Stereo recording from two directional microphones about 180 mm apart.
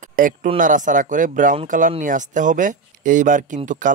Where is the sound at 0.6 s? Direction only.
45° right (ahead or behind).